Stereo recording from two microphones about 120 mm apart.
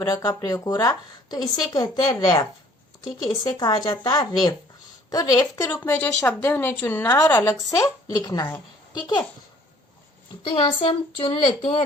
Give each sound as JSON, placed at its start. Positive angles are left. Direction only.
{"t": 0.0, "sound": "speech", "side_deg": 35}
{"t": 5.7, "sound": "a woman's voice", "side_deg": 20}
{"t": 10.4, "sound": "speech", "side_deg": 45}